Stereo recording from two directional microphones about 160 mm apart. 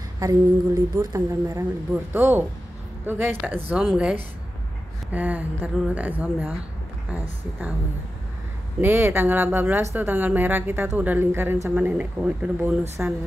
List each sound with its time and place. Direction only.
0.2 s a woman's voice: 20° right (ahead or behind)
8.8 s speech: 15° right (ahead or behind)